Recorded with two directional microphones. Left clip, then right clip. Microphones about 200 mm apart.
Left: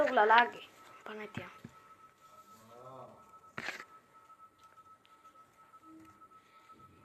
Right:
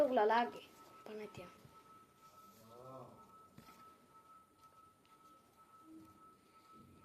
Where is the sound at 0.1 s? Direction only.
20° left (ahead or behind).